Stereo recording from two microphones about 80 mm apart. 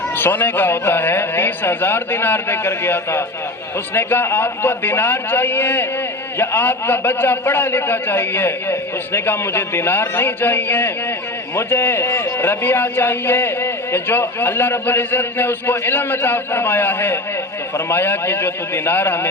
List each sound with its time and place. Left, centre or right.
0.2 s a man's voice: left